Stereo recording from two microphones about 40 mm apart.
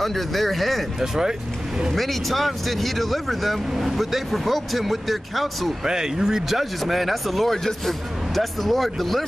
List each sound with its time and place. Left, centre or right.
0.0 s speech: centre
0.9 s speech: centre
2.0 s speech: centre
5.9 s speech: centre